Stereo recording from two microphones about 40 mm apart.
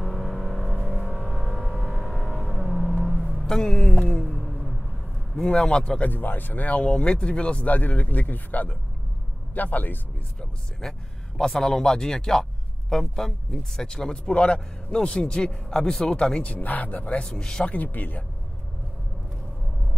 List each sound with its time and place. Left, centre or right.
0.0 s vehicle: centre
1.0 s vehicle: centre
1.8 s a sound: centre
3.4 s music: centre
4.4 s a sound: centre
5.4 s a man's voice: centre
6.0 s speech: left
6.8 s a man's voice: left
7.6 s speech: left
10.8 s a man's voice: centre
16.4 s speech: left
17.4 s speech: centre
17.8 s speech: left